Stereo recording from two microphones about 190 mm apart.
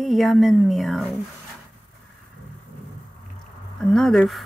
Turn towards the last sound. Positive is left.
turn(degrees=0)  # may be behind; listen again after turning